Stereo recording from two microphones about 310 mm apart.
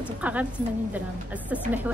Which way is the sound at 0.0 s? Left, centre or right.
Centre.